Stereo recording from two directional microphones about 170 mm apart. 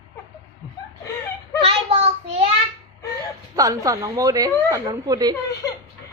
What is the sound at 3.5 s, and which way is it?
A woman's voice, 20° right (ahead or behind).